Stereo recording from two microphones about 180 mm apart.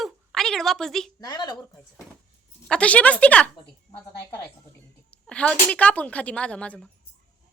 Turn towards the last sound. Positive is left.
turn(degrees=5)  # may be behind; listen again after turning